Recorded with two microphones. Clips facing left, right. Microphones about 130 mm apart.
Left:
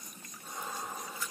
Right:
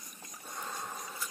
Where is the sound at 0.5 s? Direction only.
5° left (ahead or behind).